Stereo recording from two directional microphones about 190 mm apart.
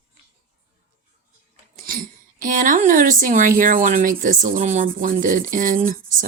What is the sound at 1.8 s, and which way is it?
Speech, 50° right (ahead or behind).